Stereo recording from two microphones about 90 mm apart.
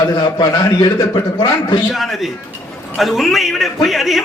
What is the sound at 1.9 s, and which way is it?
A man's voice, centre (ahead or behind).